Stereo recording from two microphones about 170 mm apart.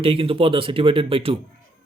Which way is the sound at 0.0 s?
30° right (ahead or behind).